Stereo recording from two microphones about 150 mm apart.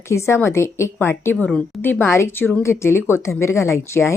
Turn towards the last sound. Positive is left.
turn(degrees=15)  # may be behind; listen again after turning